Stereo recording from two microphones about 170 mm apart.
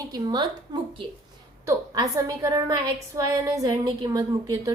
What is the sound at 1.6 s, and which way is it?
A woman's voice, 20° right (ahead or behind).